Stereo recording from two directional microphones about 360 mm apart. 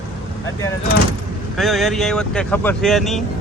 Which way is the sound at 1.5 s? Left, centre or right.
Centre.